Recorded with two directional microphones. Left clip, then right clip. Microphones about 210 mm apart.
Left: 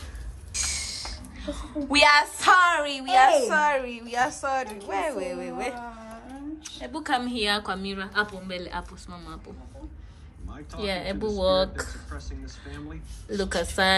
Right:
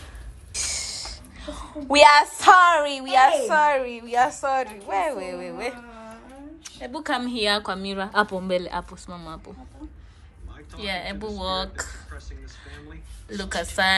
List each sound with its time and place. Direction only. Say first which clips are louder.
0.7 s a woman's voice: right 3 dB; centre (ahead or behind)
10.8 s speech: left 1 dB; 20° left (ahead or behind)
13.3 s speech: left 2 dB; 20° left (ahead or behind)